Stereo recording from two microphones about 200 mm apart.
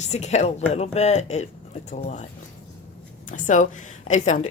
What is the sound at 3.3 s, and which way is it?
A woman's voice, 40° left (ahead or behind).